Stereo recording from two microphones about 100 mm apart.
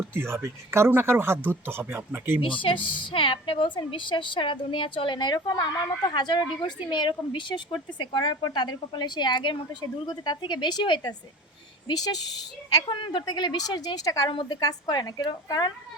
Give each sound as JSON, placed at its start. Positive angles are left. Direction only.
{"t": 0.1, "sound": "speech", "side_deg": -25}
{"t": 2.4, "sound": "a woman's voice", "side_deg": 55}
{"t": 12.7, "sound": "a woman's voice", "side_deg": 55}